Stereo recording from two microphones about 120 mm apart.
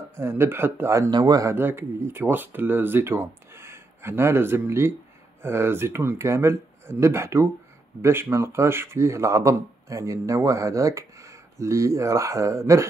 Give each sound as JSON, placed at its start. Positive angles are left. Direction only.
{"t": 0.1, "sound": "a man's voice", "side_deg": -20}
{"t": 1.5, "sound": "a man's voice", "side_deg": -20}